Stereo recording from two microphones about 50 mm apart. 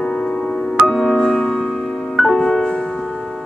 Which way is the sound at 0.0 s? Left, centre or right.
Centre.